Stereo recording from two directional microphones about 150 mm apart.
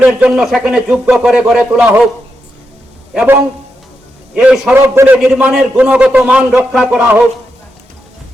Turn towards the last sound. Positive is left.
turn(degrees=-10)  # may be behind; listen again after turning